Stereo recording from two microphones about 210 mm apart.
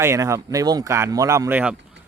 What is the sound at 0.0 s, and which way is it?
Speech, 15° right (ahead or behind).